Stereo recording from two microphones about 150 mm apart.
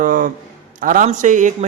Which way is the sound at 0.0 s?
60° right (ahead or behind).